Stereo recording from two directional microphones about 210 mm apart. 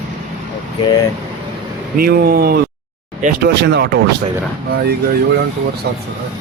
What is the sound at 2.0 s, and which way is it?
Speech, 45° right (ahead or behind).